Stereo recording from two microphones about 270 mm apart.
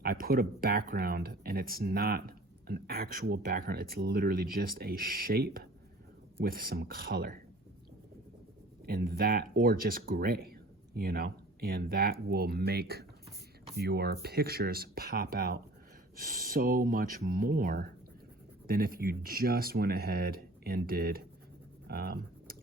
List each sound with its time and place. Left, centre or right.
0.0 s speech: right
8.9 s speech: right